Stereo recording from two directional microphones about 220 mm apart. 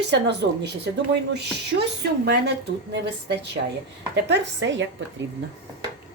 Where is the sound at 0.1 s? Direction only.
50° right (ahead or behind).